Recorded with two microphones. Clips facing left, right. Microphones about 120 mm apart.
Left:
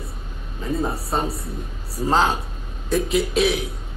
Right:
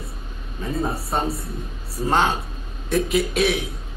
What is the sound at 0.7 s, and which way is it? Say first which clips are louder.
A man's voice: left 1 dB; centre (ahead or behind).